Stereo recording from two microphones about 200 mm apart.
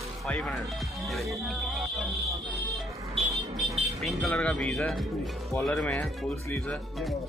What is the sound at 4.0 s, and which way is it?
Speech, centre (ahead or behind).